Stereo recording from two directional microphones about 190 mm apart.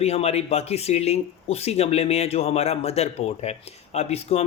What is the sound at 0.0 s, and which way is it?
Speech, 35° left (ahead or behind).